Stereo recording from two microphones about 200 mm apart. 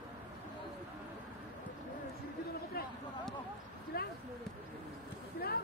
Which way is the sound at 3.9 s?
50° left (ahead or behind).